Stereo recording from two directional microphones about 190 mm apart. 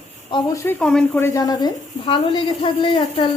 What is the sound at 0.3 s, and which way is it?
Speech, 25° left (ahead or behind).